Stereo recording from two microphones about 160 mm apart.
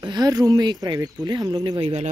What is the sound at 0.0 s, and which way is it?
Speech, 25° right (ahead or behind).